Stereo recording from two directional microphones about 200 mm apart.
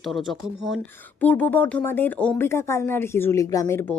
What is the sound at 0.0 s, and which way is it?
A woman's voice, centre (ahead or behind).